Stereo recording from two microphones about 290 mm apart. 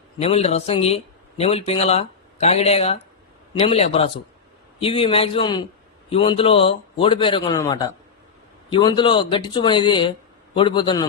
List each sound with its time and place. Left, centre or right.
0.2 s speech: left